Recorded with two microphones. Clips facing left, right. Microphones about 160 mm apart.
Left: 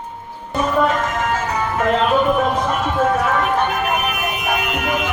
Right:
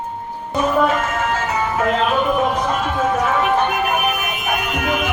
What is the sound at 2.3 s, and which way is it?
Clip-clop, centre (ahead or behind).